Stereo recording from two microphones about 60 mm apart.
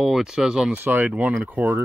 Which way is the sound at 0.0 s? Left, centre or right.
Centre.